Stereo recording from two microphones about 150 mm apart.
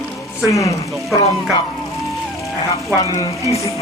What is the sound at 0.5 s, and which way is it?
Speech, 20° left (ahead or behind).